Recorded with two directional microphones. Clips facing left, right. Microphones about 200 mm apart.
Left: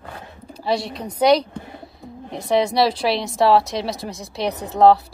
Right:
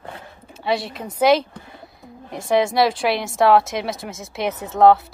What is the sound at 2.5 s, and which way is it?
A woman's voice, centre (ahead or behind).